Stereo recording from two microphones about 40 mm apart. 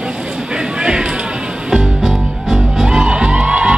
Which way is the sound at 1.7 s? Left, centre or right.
Centre.